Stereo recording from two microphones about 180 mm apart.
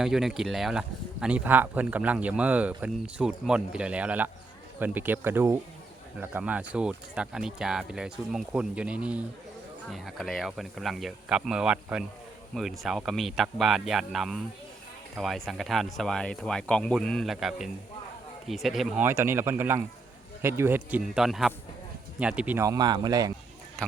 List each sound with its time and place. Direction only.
0.0 s speech: centre (ahead or behind)
19.0 s speech: 15° right (ahead or behind)